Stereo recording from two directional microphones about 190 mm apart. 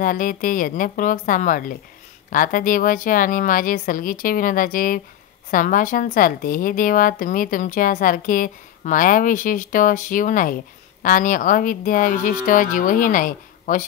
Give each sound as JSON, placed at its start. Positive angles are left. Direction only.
{"t": 0.0, "sound": "a woman's voice", "side_deg": 45}